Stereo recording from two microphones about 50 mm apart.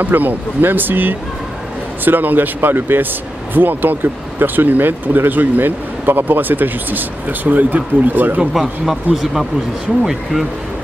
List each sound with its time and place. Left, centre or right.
0.0 s speech: right
8.5 s speech: centre